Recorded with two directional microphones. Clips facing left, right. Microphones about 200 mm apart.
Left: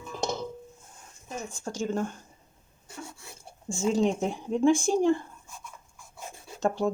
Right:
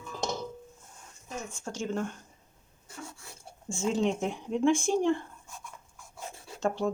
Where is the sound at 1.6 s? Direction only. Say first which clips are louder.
Left 3 dB; 40° left (ahead or behind).